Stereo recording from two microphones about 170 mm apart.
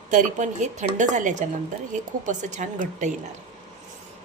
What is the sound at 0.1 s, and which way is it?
A woman's voice, 45° right (ahead or behind).